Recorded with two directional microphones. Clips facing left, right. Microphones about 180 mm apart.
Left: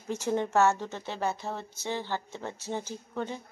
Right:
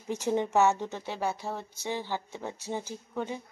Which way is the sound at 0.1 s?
15° right (ahead or behind).